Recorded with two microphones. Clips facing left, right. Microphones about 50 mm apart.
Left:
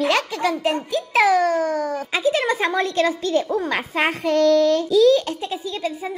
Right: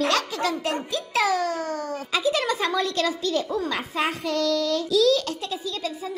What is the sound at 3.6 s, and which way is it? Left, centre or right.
A child's voice, left.